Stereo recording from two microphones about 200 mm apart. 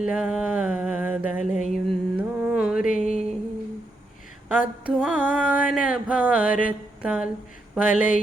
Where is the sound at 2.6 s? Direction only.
5° right (ahead or behind).